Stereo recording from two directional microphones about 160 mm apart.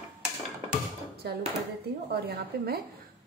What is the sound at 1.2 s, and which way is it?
A woman's voice, 80° right.